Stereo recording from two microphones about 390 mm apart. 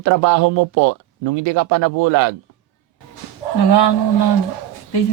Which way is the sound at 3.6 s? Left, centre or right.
Left.